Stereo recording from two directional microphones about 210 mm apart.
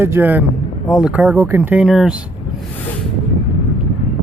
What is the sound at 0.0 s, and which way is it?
Speech, 10° right (ahead or behind).